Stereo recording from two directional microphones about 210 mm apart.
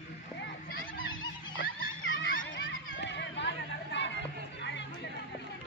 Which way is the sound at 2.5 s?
60° left (ahead or behind).